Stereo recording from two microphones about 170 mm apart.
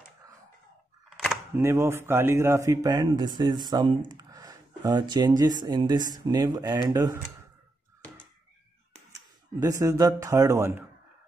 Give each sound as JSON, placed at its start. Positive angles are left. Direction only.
{"t": 1.1, "sound": "a sound", "side_deg": 0}
{"t": 1.5, "sound": "speech", "side_deg": -15}
{"t": 9.6, "sound": "speech", "side_deg": -20}